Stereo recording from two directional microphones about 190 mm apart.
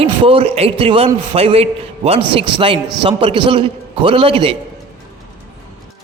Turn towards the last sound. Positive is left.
turn(degrees=-30)  # may be behind; listen again after turning